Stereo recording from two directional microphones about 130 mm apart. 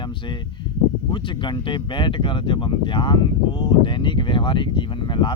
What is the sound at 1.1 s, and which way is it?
Speech, 40° left (ahead or behind).